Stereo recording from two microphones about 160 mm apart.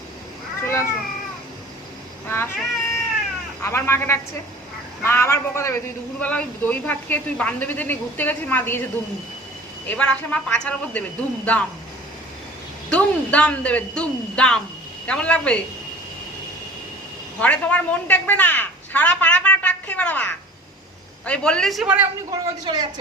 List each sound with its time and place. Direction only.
0.6 s cat: 15° left (ahead or behind)
2.2 s a sound: 15° left (ahead or behind)
3.6 s a man's voice: 15° left (ahead or behind)
9.8 s a man's voice: 10° left (ahead or behind)
12.9 s a man's voice: 10° left (ahead or behind)
17.4 s a woman's voice: 10° left (ahead or behind)
22.3 s speech: 25° right (ahead or behind)